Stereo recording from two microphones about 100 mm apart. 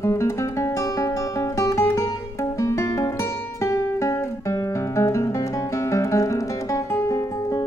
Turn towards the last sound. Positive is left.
turn(degrees=35)  # may be behind; listen again after turning